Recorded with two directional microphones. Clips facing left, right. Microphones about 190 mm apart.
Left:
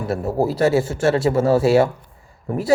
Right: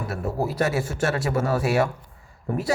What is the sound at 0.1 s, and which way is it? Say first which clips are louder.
Speech: left 8 dB; 30° left (ahead or behind).